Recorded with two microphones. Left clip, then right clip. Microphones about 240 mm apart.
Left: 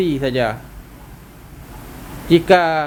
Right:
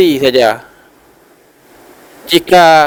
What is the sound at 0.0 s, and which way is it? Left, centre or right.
Speech, right.